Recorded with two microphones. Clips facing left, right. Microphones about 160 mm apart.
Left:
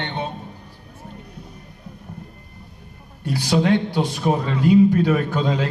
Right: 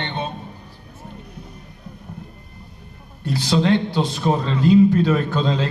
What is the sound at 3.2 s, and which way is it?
A man's voice, 15° left (ahead or behind).